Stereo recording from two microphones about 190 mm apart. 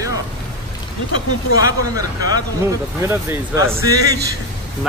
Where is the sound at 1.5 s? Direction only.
20° right (ahead or behind).